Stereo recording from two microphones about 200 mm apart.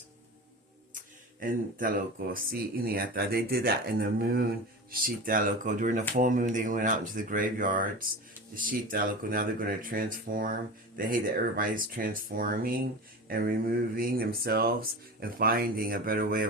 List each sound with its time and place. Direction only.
1.4 s speech: 45° right (ahead or behind)